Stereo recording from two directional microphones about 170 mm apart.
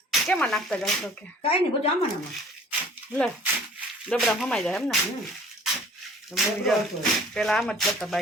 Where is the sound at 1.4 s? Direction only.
35° left (ahead or behind).